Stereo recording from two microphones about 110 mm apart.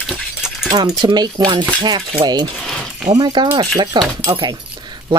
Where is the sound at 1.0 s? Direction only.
40° right (ahead or behind).